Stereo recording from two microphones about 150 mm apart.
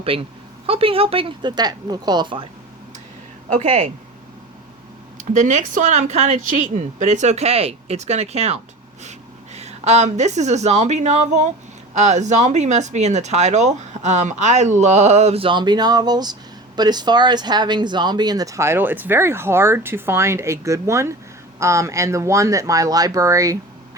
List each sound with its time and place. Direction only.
0.0 s speech: 40° right (ahead or behind)
3.5 s speech: 50° right (ahead or behind)
5.3 s speech: 55° right (ahead or behind); by 23.6 s 20° right (ahead or behind)